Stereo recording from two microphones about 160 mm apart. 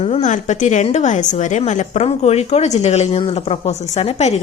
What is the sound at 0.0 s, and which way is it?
A woman's voice, 45° left (ahead or behind).